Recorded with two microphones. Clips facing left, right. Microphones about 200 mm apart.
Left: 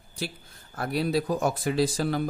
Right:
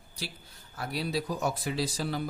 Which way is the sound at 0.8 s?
50° left (ahead or behind).